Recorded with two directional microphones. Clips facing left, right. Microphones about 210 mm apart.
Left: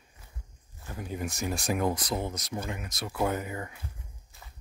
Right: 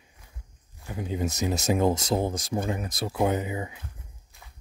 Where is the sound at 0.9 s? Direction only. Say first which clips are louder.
Right 5 dB; 20° right (ahead or behind).